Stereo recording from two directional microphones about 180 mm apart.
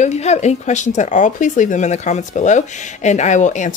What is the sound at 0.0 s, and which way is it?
Speech, 40° left (ahead or behind).